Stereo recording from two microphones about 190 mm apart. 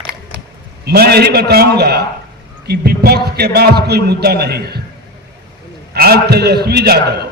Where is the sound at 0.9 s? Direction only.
55° right (ahead or behind).